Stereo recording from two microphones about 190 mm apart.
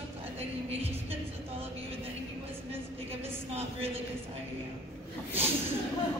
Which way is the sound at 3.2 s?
30° right (ahead or behind).